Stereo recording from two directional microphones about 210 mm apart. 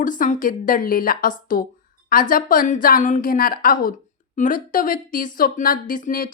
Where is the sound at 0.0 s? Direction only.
40° left (ahead or behind).